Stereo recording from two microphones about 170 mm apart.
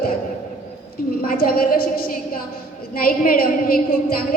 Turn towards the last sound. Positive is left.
turn(degrees=55)  # may be behind; listen again after turning